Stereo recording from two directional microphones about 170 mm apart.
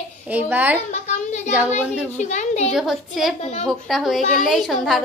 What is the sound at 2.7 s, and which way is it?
A woman's voice, centre (ahead or behind).